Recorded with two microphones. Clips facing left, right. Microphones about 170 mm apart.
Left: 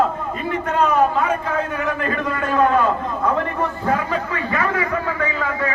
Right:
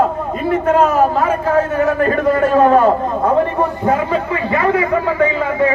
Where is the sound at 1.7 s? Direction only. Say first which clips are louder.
Right 8 dB; 40° right (ahead or behind).